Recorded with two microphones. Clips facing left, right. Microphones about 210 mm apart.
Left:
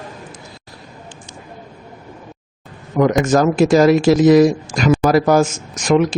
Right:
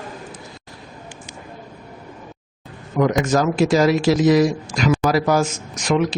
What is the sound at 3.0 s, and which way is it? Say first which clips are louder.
Speech: left 4 dB; 50° left (ahead or behind).